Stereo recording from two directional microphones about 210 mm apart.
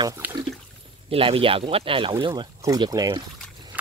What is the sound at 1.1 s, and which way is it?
Speech, 25° right (ahead or behind).